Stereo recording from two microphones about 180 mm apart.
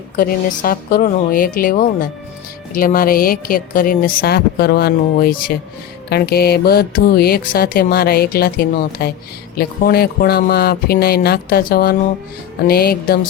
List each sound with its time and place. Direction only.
0.2 s speech: 55° left (ahead or behind)